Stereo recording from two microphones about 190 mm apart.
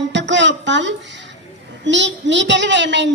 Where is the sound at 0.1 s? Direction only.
70° right (ahead or behind).